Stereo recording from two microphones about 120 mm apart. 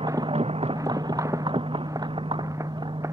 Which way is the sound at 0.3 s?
55° right (ahead or behind).